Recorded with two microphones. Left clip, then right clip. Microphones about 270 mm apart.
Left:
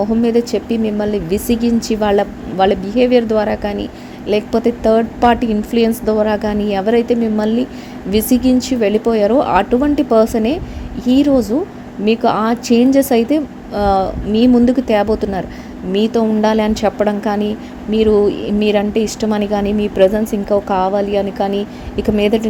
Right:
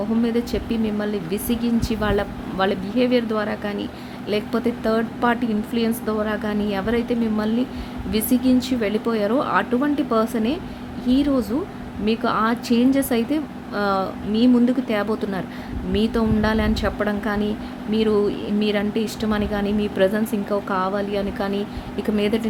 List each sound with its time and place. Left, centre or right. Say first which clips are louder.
0.2 s a woman's voice: left 8 dB; centre